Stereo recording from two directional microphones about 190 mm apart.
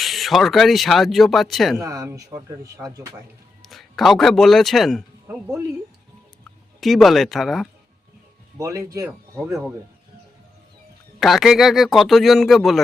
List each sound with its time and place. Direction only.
0.0 s speech: centre (ahead or behind)
1.8 s speech: 15° right (ahead or behind)
3.6 s speech: centre (ahead or behind)
5.3 s speech: 10° right (ahead or behind)
6.7 s speech: centre (ahead or behind)
8.5 s speech: 15° right (ahead or behind)
9.3 s speech: centre (ahead or behind)
11.2 s speech: centre (ahead or behind)